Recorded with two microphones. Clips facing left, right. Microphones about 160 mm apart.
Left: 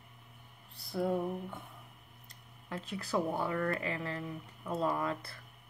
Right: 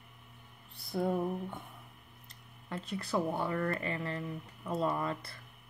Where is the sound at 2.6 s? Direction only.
Centre (ahead or behind).